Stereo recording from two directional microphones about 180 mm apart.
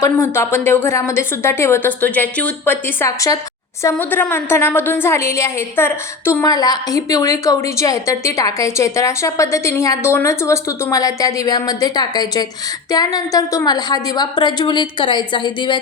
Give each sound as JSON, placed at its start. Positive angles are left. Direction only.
{"t": 0.0, "sound": "a woman's voice", "side_deg": 15}